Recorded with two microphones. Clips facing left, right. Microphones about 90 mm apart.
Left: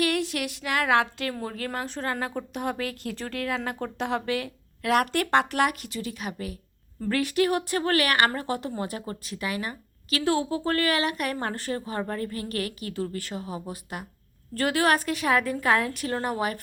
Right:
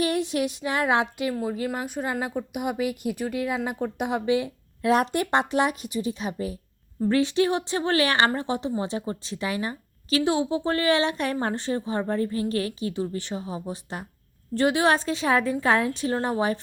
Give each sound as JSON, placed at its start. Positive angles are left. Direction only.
{"t": 0.0, "sound": "a woman's voice", "side_deg": -20}